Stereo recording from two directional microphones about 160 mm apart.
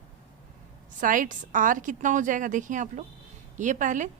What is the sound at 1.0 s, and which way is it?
A woman's voice, 55° right (ahead or behind).